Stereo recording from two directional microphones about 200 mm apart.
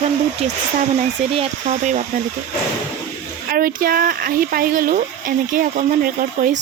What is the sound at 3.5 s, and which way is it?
Speech, 45° right (ahead or behind).